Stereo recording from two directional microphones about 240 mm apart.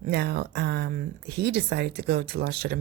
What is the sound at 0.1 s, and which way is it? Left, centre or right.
Speech, right.